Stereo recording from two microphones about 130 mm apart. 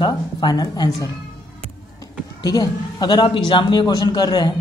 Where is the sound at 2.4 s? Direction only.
30° left (ahead or behind).